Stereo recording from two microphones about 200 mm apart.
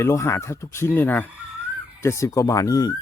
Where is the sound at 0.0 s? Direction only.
15° left (ahead or behind).